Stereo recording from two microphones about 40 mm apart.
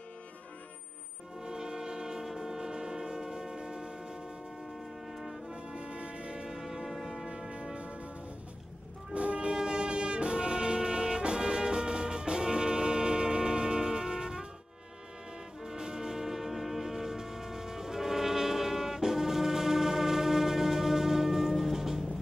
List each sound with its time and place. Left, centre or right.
1.4 s a sound: centre
2.2 s train: centre
5.1 s music: centre
5.5 s music: right
6.5 s a sound: centre
7.7 s music: right
9.1 s music: right
15.6 s music: centre